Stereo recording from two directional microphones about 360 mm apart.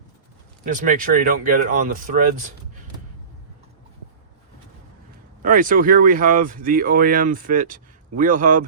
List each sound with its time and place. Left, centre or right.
0.9 s speech: right
5.4 s speech: right